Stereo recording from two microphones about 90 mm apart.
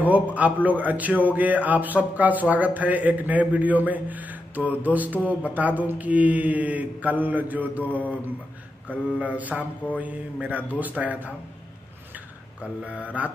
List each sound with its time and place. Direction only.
0.0 s a man's voice: 15° right (ahead or behind)
8.9 s a man's voice: 15° right (ahead or behind)
12.8 s a man's voice: 15° right (ahead or behind)